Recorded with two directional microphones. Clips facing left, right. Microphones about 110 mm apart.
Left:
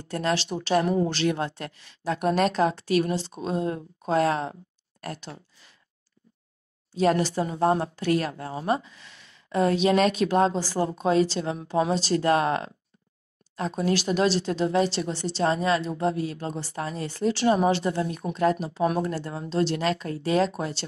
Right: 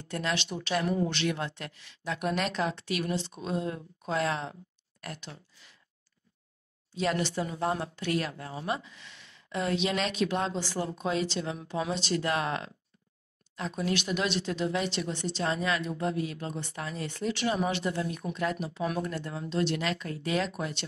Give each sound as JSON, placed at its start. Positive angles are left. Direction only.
{"t": 0.0, "sound": "speech", "side_deg": 35}
{"t": 6.9, "sound": "speech", "side_deg": 40}